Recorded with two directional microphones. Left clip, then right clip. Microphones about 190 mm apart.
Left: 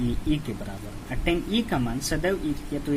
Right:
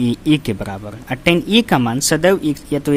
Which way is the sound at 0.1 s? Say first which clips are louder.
Right 11 dB; 60° right (ahead or behind).